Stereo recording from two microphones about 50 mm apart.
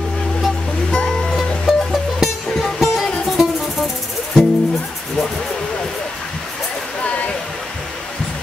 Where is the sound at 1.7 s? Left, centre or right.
Centre.